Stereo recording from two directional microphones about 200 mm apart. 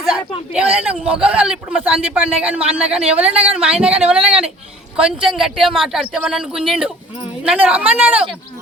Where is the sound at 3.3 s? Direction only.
30° right (ahead or behind).